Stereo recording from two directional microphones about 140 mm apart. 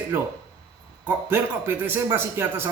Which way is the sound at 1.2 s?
15° right (ahead or behind).